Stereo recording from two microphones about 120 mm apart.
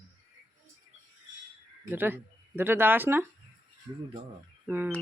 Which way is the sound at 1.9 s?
15° right (ahead or behind).